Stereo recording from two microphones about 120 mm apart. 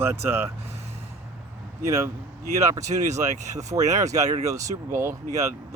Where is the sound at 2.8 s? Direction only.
75° right (ahead or behind).